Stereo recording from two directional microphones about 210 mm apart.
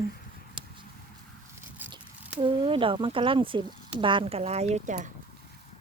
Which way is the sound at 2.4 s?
25° right (ahead or behind).